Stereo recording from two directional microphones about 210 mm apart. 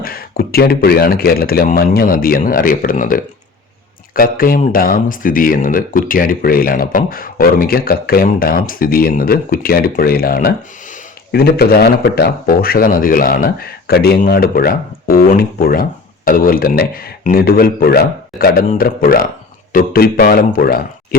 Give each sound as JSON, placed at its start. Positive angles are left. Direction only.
{"t": 0.0, "sound": "speech", "side_deg": 45}